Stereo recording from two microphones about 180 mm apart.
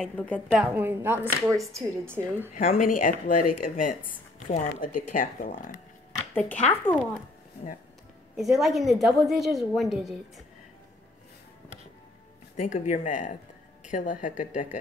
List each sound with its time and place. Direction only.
0.0 s a woman's voice: 5° left (ahead or behind)
0.7 s speech: 10° right (ahead or behind)
2.8 s speech: 50° left (ahead or behind)
6.3 s speech: 10° left (ahead or behind)
8.4 s a woman's voice: centre (ahead or behind)
12.5 s speech: 40° left (ahead or behind)